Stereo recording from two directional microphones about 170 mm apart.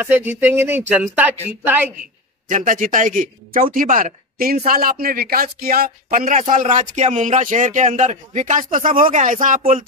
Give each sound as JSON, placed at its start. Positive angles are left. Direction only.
{"t": 0.0, "sound": "speech", "side_deg": -10}
{"t": 2.4, "sound": "speech", "side_deg": -50}